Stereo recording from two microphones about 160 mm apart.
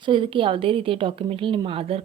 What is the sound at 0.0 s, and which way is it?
Speech, 30° right (ahead or behind).